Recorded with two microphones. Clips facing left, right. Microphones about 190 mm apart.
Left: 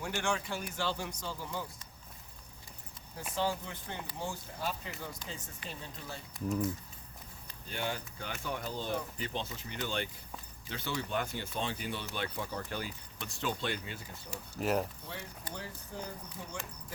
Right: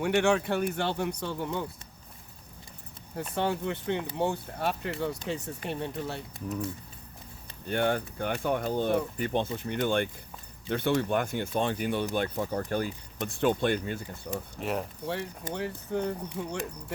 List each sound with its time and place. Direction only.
0.0 s speech: 65° right (ahead or behind)
3.3 s speech: 65° right (ahead or behind)
7.7 s speech: 60° right (ahead or behind)
14.3 s speech: 60° right (ahead or behind)
14.6 s speech: centre (ahead or behind)
15.0 s speech: 70° right (ahead or behind)